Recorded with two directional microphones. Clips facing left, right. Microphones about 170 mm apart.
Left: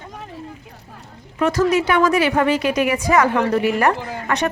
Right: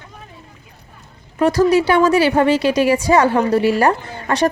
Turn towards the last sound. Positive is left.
turn(degrees=-30)  # may be behind; listen again after turning